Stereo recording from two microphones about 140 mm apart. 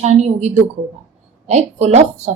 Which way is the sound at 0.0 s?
50° right (ahead or behind).